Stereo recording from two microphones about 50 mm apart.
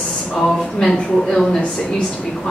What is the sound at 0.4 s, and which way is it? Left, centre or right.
Speech, centre.